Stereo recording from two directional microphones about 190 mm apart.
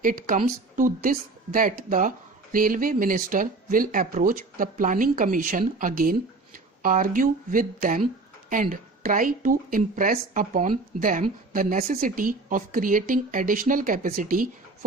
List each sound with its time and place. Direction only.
0.0 s a woman's voice: 45° right (ahead or behind)